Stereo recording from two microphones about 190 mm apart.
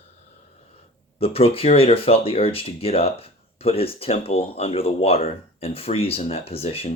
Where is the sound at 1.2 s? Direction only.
30° left (ahead or behind).